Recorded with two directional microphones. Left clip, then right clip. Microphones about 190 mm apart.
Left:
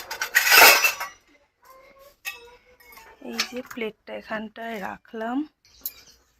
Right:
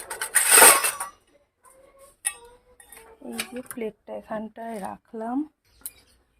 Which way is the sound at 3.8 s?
10° right (ahead or behind).